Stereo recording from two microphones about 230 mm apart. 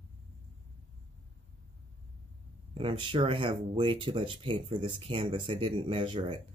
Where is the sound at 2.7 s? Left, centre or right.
Right.